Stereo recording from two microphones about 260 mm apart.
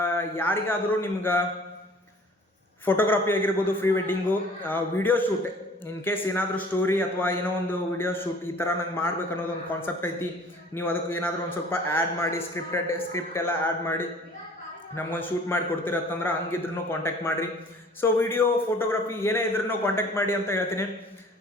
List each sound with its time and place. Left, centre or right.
0.0 s a man's voice: centre
2.8 s a man's voice: centre